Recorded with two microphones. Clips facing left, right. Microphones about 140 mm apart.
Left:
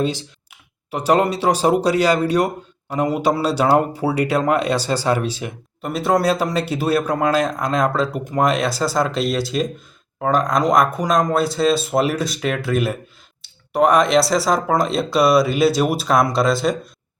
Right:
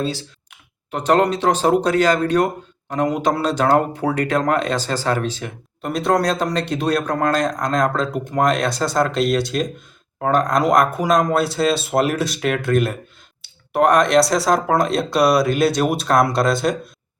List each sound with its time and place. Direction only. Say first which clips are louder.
0.0 s speech: left 2 dB; 20° left (ahead or behind); by 16.7 s centre (ahead or behind)